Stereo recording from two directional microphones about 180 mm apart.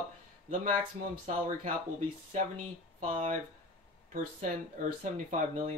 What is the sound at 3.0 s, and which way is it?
Speech, 45° right (ahead or behind).